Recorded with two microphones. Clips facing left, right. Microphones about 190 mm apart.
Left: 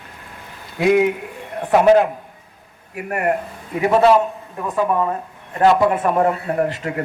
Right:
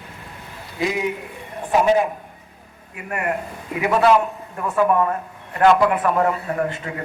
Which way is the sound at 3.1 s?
40° left (ahead or behind).